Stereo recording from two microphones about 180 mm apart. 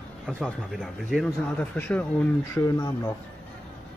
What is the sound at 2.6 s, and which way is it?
Speech, 20° left (ahead or behind).